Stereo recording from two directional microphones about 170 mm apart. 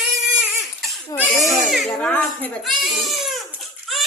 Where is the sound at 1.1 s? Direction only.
10° left (ahead or behind).